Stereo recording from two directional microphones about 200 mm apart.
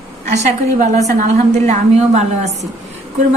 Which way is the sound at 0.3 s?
35° right (ahead or behind).